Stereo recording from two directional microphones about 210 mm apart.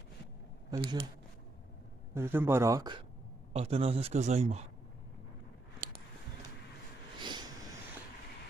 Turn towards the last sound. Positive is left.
turn(degrees=-20)  # may be behind; listen again after turning